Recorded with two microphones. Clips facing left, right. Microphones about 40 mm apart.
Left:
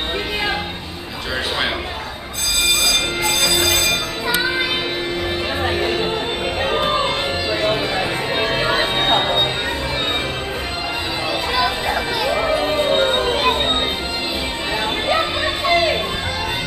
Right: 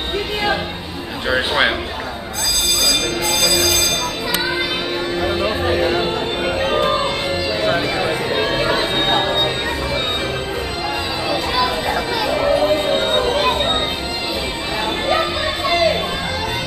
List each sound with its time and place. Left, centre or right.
3.3 s music: left
5.8 s music: centre
11.5 s music: centre
15.0 s music: centre